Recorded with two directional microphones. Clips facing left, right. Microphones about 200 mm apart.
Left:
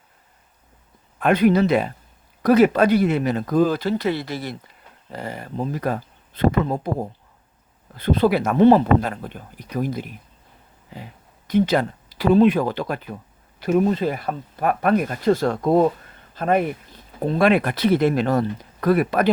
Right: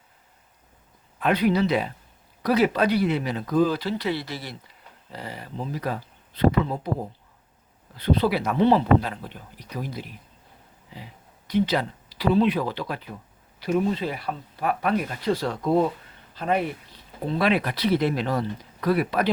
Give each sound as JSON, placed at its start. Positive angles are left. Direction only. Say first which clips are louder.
{"t": 1.2, "sound": "speech", "louder": "left 5 dB", "side_deg": 50}
{"t": 7.9, "sound": "speech", "louder": "left 4 dB", "side_deg": 50}